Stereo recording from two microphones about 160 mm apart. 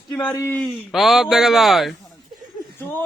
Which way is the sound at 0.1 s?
10° left (ahead or behind).